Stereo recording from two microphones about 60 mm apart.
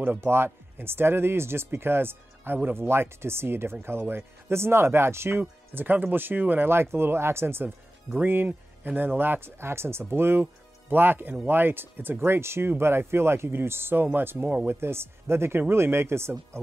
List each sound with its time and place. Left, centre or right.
0.2 s speech: right
5.4 s speech: right